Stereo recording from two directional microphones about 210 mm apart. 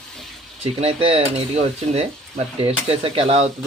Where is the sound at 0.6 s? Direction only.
30° right (ahead or behind).